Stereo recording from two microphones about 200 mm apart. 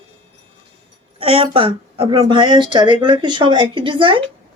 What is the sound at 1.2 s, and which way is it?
Speech, 30° right (ahead or behind).